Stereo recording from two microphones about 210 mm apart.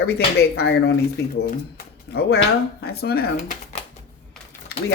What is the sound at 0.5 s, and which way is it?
Speech, 50° left (ahead or behind).